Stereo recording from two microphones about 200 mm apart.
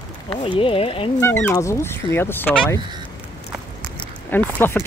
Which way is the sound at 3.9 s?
10° left (ahead or behind).